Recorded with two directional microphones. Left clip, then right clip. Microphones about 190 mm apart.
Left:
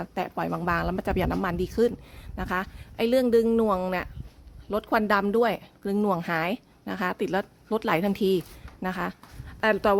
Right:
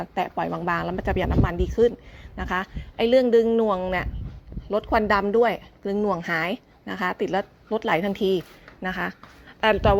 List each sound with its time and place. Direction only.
0.0 s speech: 15° left (ahead or behind)
2.3 s a woman's voice: 15° left (ahead or behind)
6.2 s a woman's voice: 15° left (ahead or behind)